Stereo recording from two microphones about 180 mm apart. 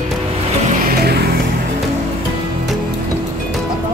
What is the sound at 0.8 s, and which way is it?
Music, 65° right (ahead or behind).